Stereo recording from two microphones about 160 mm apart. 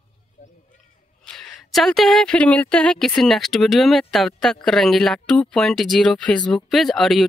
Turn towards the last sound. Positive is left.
turn(degrees=0)  # may be behind; listen again after turning